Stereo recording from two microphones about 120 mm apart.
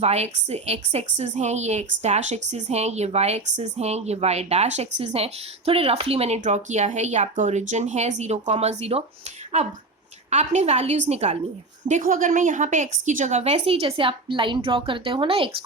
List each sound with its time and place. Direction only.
0.0 s a woman's voice: 70° right (ahead or behind)
10.2 s a woman's voice: 70° right (ahead or behind)
11.9 s a woman's voice: 90° right; by 15.5 s 50° right (ahead or behind)